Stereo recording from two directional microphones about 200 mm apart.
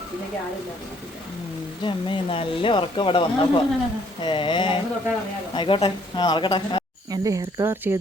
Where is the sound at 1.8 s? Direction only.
25° left (ahead or behind).